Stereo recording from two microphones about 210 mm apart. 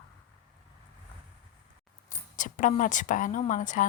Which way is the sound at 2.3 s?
35° left (ahead or behind).